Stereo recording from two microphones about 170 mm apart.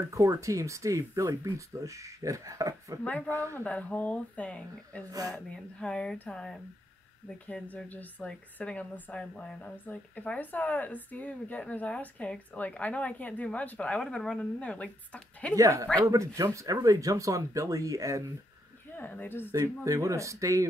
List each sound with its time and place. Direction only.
0.1 s speech: 20° right (ahead or behind)
3.0 s speech: 10° left (ahead or behind)
15.5 s speech: 20° right (ahead or behind)
18.9 s speech: 10° left (ahead or behind)
19.5 s speech: 20° right (ahead or behind)